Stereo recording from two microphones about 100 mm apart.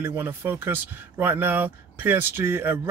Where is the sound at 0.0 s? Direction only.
20° right (ahead or behind).